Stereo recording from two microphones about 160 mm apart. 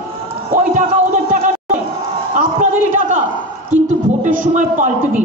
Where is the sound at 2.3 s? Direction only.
60° right (ahead or behind).